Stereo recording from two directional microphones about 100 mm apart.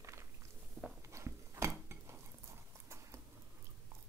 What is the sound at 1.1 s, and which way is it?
Dog, 30° right (ahead or behind).